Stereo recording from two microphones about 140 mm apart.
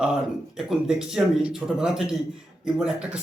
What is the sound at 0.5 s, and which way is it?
A man's voice, 5° right (ahead or behind).